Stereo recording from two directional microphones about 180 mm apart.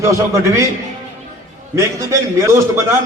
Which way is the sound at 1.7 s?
15° right (ahead or behind).